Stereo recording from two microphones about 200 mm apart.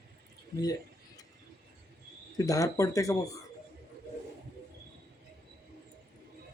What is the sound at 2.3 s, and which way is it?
Speech, 15° left (ahead or behind).